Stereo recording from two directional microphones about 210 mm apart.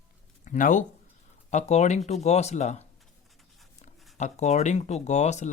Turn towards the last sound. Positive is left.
turn(degrees=35)  # may be behind; listen again after turning